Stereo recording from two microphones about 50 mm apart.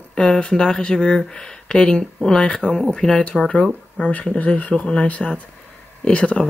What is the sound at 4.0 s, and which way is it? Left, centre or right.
Speech, left.